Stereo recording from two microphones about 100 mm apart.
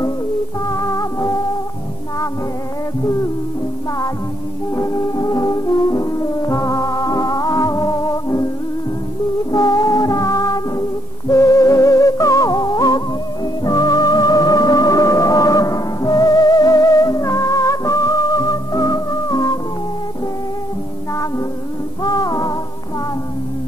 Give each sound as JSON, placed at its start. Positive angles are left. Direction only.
{"t": 0.7, "sound": "music", "side_deg": 35}
{"t": 4.7, "sound": "brass instrument", "side_deg": 30}
{"t": 9.5, "sound": "music", "side_deg": 40}
{"t": 21.1, "sound": "music", "side_deg": 35}